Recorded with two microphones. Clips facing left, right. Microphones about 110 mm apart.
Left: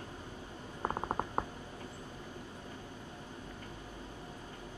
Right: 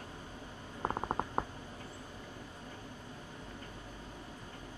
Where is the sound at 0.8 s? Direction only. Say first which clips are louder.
Even; 5° left (ahead or behind).